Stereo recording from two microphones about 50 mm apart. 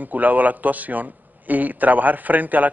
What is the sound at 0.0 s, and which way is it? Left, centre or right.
A man's voice, right.